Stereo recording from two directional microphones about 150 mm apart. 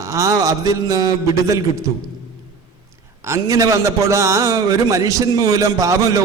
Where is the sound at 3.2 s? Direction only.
20° right (ahead or behind).